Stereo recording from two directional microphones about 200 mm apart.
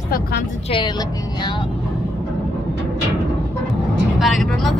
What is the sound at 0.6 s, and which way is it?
Speech, 25° left (ahead or behind).